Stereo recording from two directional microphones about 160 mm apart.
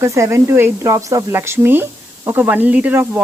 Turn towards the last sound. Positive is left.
turn(degrees=-10)  # may be behind; listen again after turning